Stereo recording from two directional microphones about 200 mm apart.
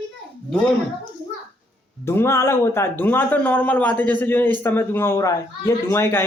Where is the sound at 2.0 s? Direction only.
10° left (ahead or behind).